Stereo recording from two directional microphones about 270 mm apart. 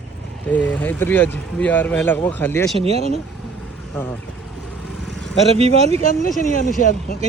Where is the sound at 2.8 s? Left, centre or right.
Right.